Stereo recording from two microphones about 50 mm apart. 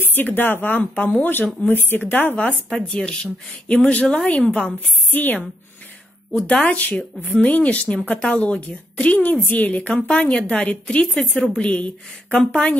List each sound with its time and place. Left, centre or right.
0.0 s a woman's voice: left
2.3 s a woman's voice: left
6.6 s speech: left